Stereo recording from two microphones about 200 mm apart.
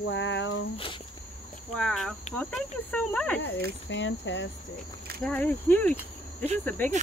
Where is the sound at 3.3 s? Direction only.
60° left (ahead or behind).